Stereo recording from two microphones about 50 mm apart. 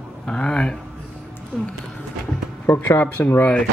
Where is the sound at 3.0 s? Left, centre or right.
Left.